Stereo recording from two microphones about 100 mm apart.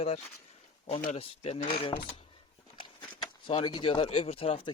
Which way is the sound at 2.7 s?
55° left (ahead or behind).